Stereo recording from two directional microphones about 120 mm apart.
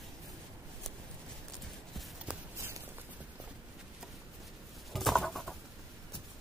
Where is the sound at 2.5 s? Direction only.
25° right (ahead or behind).